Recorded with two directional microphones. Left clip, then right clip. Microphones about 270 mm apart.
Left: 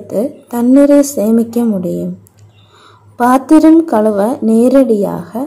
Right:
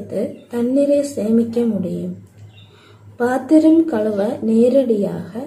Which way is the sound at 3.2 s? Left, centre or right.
Left.